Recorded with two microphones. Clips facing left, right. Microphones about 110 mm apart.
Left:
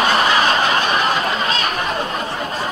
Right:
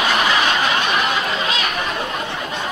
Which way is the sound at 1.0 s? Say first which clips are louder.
Left 2 dB; 35° left (ahead or behind).